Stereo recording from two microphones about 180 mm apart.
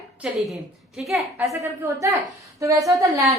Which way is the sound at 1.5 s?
20° right (ahead or behind).